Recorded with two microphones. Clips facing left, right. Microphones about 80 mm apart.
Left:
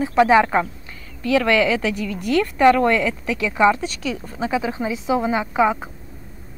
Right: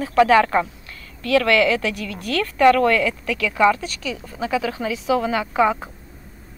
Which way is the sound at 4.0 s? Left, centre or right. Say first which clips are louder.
Left 2 dB; left.